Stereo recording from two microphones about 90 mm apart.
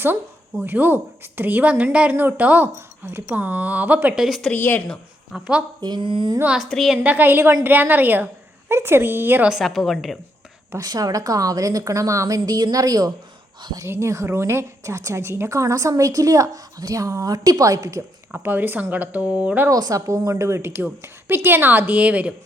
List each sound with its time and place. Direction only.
0.6 s a woman's voice: 20° right (ahead or behind)
4.2 s a woman's voice: centre (ahead or behind)
4.5 s speech: 25° left (ahead or behind)
5.3 s a woman's voice: 5° right (ahead or behind)
5.8 s speech: 60° right (ahead or behind)
6.6 s a woman's voice: centre (ahead or behind)
7.0 s a woman's voice: 20° right (ahead or behind)
9.5 s a woman's voice: centre (ahead or behind)
10.8 s a woman's voice: 45° right (ahead or behind)
13.6 s speech: 55° right (ahead or behind)
13.8 s a woman's voice: 30° right (ahead or behind)
18.3 s a woman's voice: 20° right (ahead or behind)
19.7 s a woman's voice: 40° right (ahead or behind); by 22.4 s 15° right (ahead or behind)